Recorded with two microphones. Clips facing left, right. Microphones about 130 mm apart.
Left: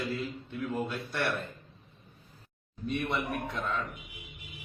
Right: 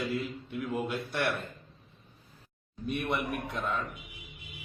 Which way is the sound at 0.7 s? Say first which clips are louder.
Right 2 dB; 15° right (ahead or behind).